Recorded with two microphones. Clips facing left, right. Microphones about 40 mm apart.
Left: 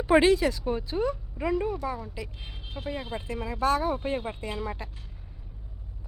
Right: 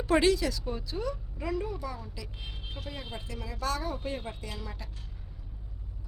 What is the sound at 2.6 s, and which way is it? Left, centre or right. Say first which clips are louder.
Vehicle: left 5 dB; centre.